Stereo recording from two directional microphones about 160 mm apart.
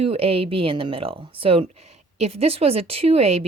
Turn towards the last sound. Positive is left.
turn(degrees=-40)  # may be behind; listen again after turning